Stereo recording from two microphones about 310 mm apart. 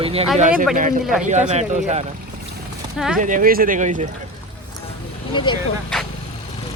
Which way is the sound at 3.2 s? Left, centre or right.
Right.